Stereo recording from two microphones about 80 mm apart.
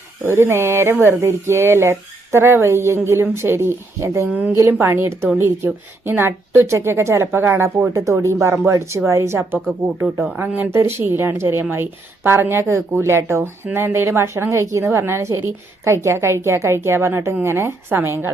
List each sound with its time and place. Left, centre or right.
0.3 s speech: right
10.2 s speech: centre